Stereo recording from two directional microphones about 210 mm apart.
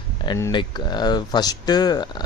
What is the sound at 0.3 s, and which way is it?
Speech, 15° left (ahead or behind).